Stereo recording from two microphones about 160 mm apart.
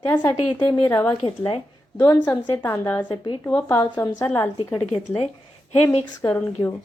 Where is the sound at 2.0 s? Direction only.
15° left (ahead or behind).